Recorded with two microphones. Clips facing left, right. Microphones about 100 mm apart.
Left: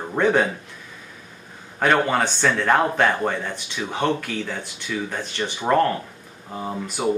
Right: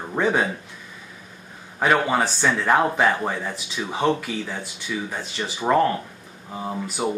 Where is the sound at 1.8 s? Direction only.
5° right (ahead or behind).